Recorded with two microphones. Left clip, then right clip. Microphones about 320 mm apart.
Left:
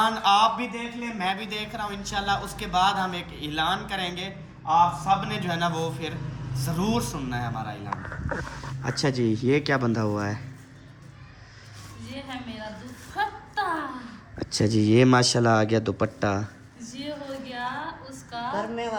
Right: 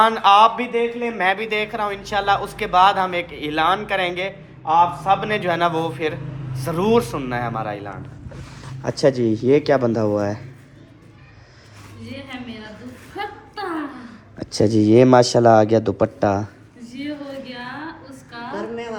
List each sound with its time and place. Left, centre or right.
0.0 s speech: centre
8.8 s speech: centre
14.5 s speech: centre
18.5 s a sound: left